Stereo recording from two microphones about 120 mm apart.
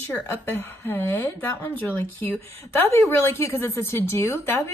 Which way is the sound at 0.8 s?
15° left (ahead or behind).